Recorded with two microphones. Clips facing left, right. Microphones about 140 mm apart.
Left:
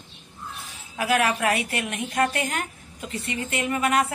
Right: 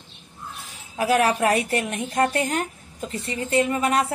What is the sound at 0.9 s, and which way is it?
Speech, 35° right (ahead or behind).